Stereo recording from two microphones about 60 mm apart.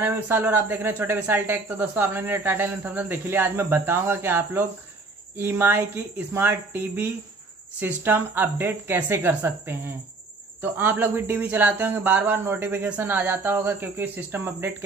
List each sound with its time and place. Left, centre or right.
0.0 s speech: right